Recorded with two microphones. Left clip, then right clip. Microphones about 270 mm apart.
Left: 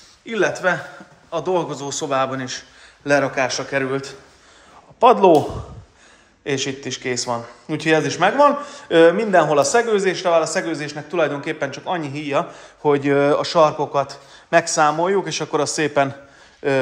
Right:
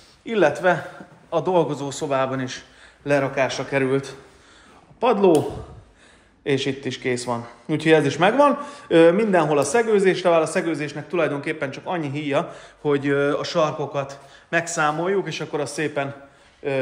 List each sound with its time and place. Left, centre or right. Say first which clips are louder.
0.2 s a man's voice: right 1 dB; centre
5.0 s a man's voice: left 6 dB; centre
6.4 s a man's voice: even; centre